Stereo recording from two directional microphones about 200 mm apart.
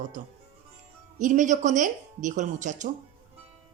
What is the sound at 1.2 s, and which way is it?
A woman's voice, 40° right (ahead or behind).